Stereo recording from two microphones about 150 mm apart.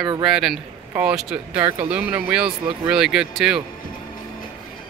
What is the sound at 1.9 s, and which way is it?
Speech, 10° right (ahead or behind).